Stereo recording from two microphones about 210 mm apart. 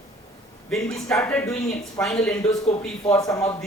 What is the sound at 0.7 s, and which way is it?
A man's voice, centre (ahead or behind).